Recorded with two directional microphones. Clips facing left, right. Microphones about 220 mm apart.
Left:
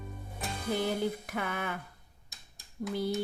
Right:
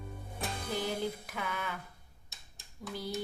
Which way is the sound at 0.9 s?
55° left (ahead or behind).